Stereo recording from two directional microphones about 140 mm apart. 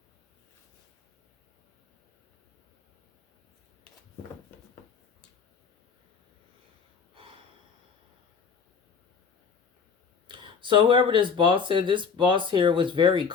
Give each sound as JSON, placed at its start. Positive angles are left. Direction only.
{"t": 7.1, "sound": "gasp", "side_deg": -40}
{"t": 10.2, "sound": "speech", "side_deg": -35}